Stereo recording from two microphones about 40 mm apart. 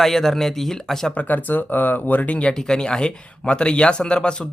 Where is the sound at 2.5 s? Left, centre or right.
Centre.